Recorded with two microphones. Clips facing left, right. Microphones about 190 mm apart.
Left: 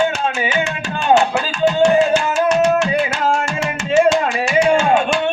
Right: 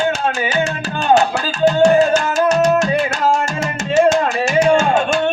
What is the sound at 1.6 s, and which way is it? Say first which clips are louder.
Music: right 2 dB; 40° right (ahead or behind).